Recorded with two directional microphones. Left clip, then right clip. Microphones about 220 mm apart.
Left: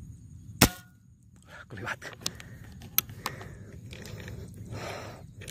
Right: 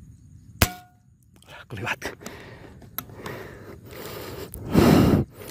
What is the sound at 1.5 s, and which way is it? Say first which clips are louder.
Speech: right 7 dB; 30° right (ahead or behind).